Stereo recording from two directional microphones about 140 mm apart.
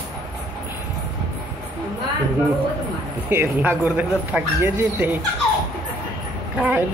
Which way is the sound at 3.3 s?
15° right (ahead or behind).